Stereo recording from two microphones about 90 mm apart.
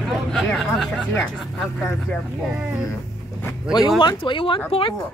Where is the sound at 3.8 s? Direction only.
55° left (ahead or behind); by 5.0 s 75° left (ahead or behind).